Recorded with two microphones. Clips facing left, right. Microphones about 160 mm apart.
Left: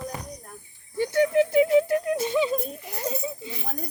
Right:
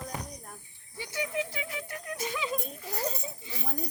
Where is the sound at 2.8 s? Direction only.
20° left (ahead or behind).